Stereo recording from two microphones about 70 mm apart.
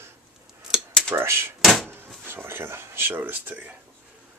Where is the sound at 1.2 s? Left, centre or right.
Right.